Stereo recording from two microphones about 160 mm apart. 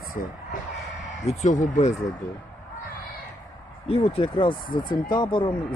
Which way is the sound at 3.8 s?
40° left (ahead or behind).